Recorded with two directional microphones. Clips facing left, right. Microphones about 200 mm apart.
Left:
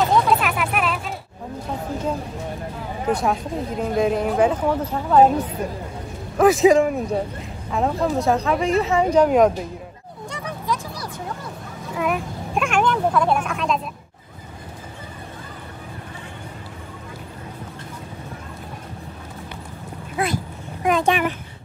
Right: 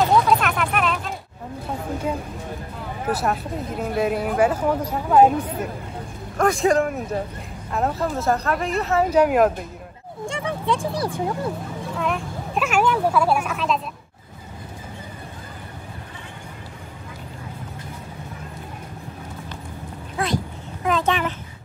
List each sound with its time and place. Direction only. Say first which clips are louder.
0.1 s vehicle: even; 5° left (ahead or behind)
3.1 s speech: left 2 dB; 5° right (ahead or behind)
6.3 s speech: left 5 dB; 5° left (ahead or behind)
10.2 s speech: right 4 dB; 25° right (ahead or behind)
12.0 s speech: left 3 dB; 5° left (ahead or behind)
12.6 s speech: even; 5° right (ahead or behind)
20.2 s a sound: even; 5° left (ahead or behind)